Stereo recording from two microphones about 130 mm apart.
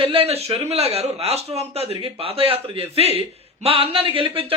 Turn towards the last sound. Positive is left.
turn(degrees=-45)  # may be behind; listen again after turning